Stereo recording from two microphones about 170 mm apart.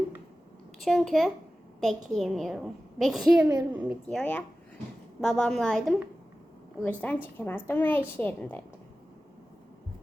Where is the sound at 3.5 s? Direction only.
15° right (ahead or behind).